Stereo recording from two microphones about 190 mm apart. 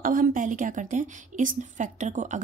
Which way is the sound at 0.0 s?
45° right (ahead or behind).